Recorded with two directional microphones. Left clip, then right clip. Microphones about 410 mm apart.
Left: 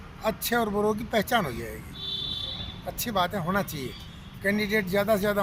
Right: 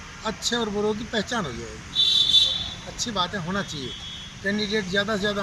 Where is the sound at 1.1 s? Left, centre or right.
Centre.